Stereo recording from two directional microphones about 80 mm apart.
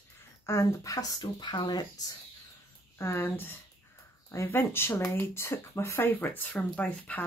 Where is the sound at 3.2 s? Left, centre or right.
Left.